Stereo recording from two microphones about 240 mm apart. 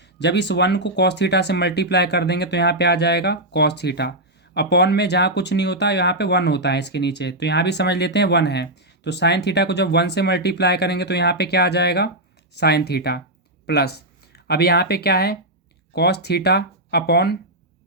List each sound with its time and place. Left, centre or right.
0.2 s speech: left